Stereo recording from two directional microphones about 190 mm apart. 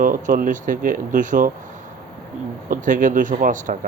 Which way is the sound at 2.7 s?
45° right (ahead or behind).